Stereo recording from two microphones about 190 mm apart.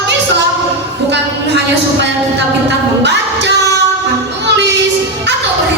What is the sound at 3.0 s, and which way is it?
Music, 65° right (ahead or behind).